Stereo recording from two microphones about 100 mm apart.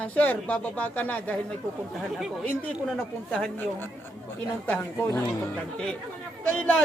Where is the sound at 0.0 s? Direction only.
15° left (ahead or behind).